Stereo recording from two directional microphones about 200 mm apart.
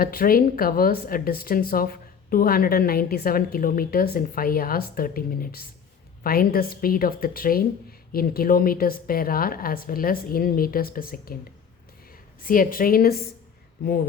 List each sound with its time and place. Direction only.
0.0 s speech: 45° left (ahead or behind)
12.4 s speech: 45° left (ahead or behind)